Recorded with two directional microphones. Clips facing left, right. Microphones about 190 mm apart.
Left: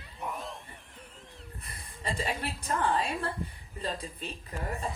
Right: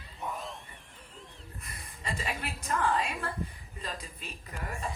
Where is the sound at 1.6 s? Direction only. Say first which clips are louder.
Left 3 dB; 30° left (ahead or behind).